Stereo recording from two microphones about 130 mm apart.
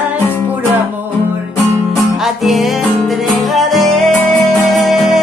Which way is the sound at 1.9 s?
Centre (ahead or behind).